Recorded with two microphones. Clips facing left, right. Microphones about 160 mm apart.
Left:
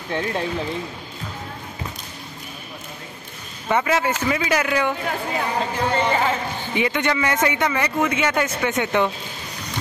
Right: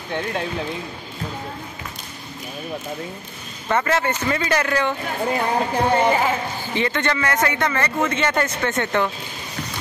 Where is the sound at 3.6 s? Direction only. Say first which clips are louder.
Even; 10° left (ahead or behind).